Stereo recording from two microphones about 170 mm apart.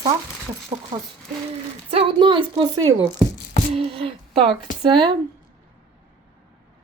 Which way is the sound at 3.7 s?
35° right (ahead or behind).